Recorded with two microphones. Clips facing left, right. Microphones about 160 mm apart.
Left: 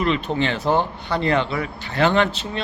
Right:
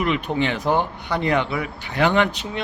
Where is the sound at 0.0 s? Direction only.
15° right (ahead or behind).